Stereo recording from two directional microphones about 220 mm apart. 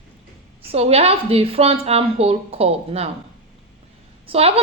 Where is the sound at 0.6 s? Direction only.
25° right (ahead or behind).